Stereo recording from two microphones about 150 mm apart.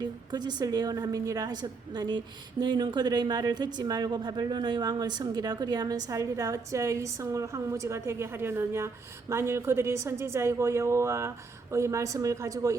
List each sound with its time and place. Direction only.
0.0 s a woman's voice: 25° right (ahead or behind)